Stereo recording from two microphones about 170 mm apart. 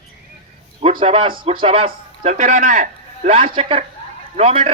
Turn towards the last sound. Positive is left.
turn(degrees=-35)  # may be behind; listen again after turning